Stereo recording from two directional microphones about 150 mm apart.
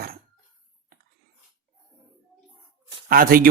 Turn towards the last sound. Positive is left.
turn(degrees=-75)  # may be behind; listen again after turning